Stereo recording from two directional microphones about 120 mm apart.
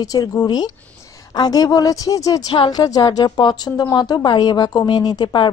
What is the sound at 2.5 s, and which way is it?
Speech, 45° left (ahead or behind).